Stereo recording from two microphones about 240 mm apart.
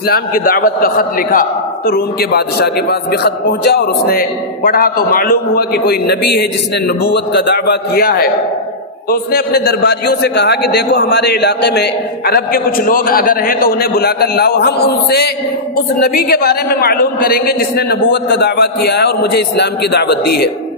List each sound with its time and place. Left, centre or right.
0.1 s a man's voice: left